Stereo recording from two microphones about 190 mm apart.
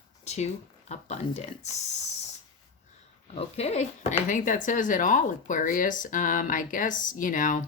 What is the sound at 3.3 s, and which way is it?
Speech, 35° left (ahead or behind).